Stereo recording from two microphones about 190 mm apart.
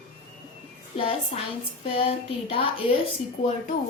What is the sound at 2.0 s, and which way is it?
Speech, 30° left (ahead or behind).